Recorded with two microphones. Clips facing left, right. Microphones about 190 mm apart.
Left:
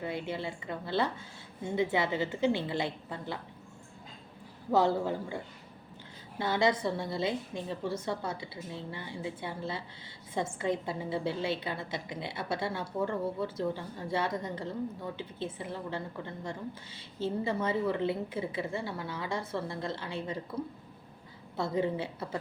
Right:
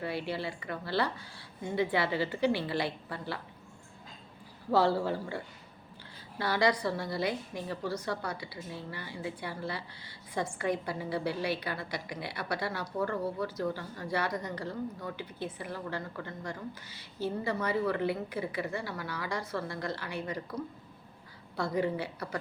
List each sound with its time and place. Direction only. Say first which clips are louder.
0.0 s a woman's voice: right 1 dB; 20° left (ahead or behind)
4.7 s a woman's voice: even; 20° left (ahead or behind)
6.4 s a woman's voice: even; 20° left (ahead or behind)